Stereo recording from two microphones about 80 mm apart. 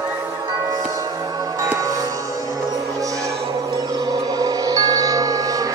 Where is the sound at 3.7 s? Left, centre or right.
Right.